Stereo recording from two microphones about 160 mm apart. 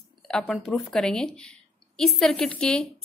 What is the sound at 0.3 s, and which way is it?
A woman's voice, 5° left (ahead or behind).